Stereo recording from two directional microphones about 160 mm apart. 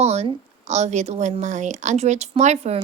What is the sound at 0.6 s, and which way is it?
A woman's voice, 45° right (ahead or behind).